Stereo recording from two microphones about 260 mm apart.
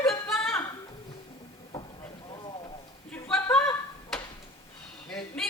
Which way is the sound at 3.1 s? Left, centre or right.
Centre.